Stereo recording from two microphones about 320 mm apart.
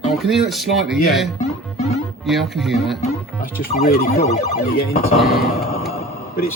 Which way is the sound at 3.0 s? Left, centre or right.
Left.